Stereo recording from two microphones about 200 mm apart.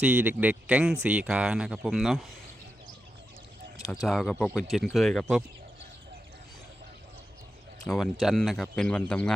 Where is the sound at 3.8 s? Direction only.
Centre (ahead or behind).